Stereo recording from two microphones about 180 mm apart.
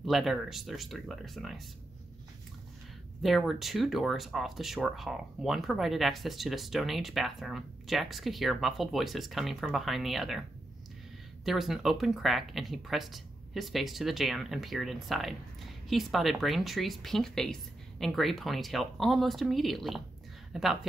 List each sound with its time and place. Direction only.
0.0 s speech: centre (ahead or behind)
3.2 s speech: centre (ahead or behind)
11.4 s speech: centre (ahead or behind)